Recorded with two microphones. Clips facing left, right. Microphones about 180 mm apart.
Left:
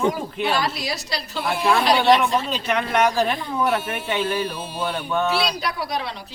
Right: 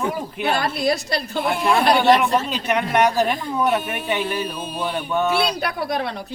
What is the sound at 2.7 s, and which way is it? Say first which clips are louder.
Speech: right 2 dB; 10° right (ahead or behind).